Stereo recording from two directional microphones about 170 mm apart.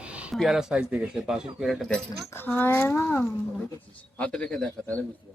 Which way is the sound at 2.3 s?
10° left (ahead or behind).